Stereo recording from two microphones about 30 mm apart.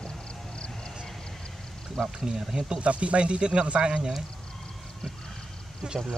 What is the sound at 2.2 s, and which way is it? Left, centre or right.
Speech, right.